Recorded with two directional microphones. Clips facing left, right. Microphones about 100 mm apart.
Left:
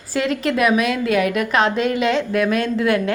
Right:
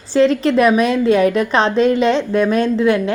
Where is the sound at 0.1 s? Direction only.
30° right (ahead or behind).